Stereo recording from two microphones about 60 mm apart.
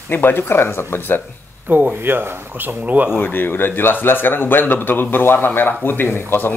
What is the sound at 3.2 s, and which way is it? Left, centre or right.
Speech, left.